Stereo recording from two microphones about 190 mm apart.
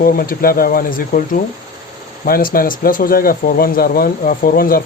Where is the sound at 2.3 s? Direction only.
50° left (ahead or behind).